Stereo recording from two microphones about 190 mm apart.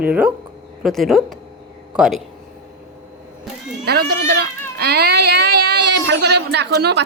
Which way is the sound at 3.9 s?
55° right (ahead or behind).